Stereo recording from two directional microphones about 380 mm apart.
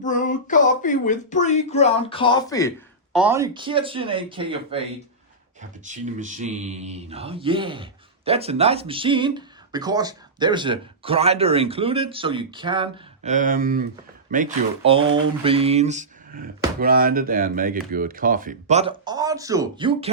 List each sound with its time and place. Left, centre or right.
0.0 s speech: centre
3.2 s mantra: centre
5.8 s mantra: centre
14.3 s speech: centre